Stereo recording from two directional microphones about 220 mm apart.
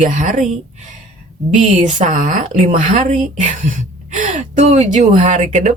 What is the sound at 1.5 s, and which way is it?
A woman's voice, 35° right (ahead or behind).